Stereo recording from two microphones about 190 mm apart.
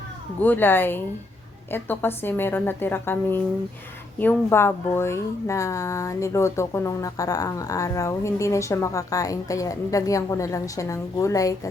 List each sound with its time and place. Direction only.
0.4 s a woman's voice: 10° left (ahead or behind)